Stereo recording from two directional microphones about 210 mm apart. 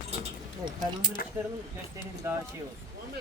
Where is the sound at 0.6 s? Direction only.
20° right (ahead or behind).